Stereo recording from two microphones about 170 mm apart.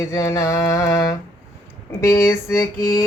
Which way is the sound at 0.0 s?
20° left (ahead or behind).